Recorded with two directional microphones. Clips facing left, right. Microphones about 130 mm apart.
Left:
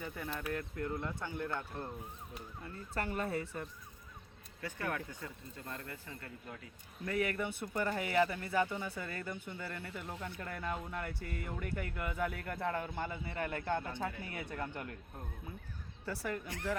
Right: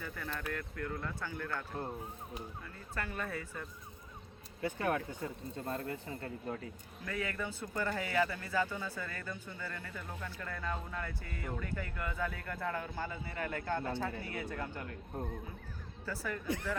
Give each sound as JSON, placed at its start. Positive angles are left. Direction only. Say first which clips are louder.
{"t": 0.3, "sound": "speech", "louder": "left 2 dB", "side_deg": 20}
{"t": 1.8, "sound": "speech", "louder": "right 3 dB", "side_deg": -25}
{"t": 2.6, "sound": "speech", "louder": "left 6 dB", "side_deg": 30}
{"t": 4.6, "sound": "speech", "louder": "right 5 dB", "side_deg": -20}
{"t": 7.0, "sound": "speech", "louder": "left 3 dB", "side_deg": 25}
{"t": 14.8, "sound": "speech", "louder": "right 4 dB", "side_deg": -30}
{"t": 16.2, "sound": "speech", "louder": "right 2 dB", "side_deg": 25}